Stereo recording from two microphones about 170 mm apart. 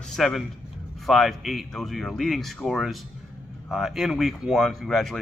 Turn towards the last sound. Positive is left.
turn(degrees=0)  # may be behind; listen again after turning